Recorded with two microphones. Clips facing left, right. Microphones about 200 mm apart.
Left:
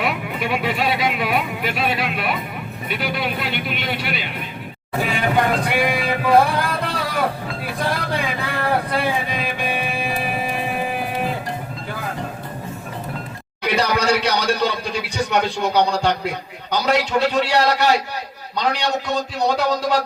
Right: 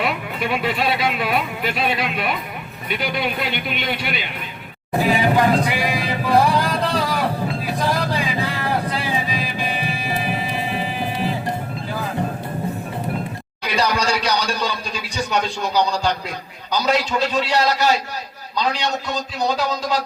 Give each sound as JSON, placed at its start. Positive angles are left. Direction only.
{"t": 0.0, "sound": "speech", "side_deg": 10}
{"t": 5.4, "sound": "speech", "side_deg": 55}
{"t": 7.6, "sound": "vehicle", "side_deg": 55}
{"t": 13.7, "sound": "speech", "side_deg": 60}